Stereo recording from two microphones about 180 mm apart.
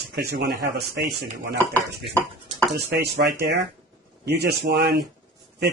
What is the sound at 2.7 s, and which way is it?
Speech, 65° right (ahead or behind).